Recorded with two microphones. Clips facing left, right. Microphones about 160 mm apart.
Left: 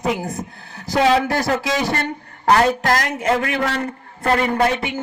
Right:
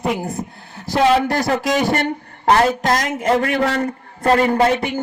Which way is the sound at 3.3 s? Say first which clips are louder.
Right 4 dB; 35° right (ahead or behind).